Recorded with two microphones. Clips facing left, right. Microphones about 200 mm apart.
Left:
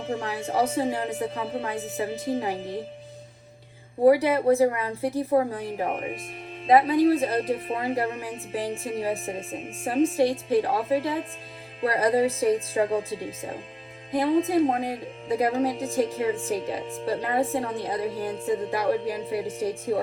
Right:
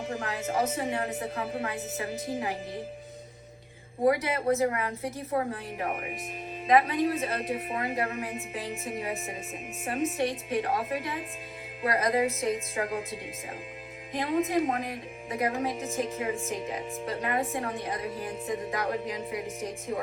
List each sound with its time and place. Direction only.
0.1 s a woman's voice: 30° left (ahead or behind)
4.0 s a woman's voice: 30° left (ahead or behind)
14.3 s a woman's voice: 30° left (ahead or behind)
16.8 s speech: centre (ahead or behind)
17.1 s a woman's voice: 30° left (ahead or behind)